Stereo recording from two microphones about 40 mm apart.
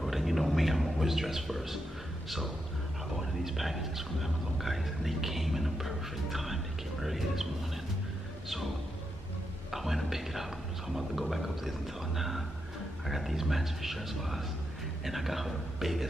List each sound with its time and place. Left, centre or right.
0.0 s a man's voice: centre
9.7 s speech: centre